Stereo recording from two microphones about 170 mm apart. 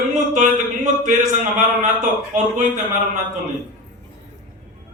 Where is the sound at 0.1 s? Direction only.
45° right (ahead or behind).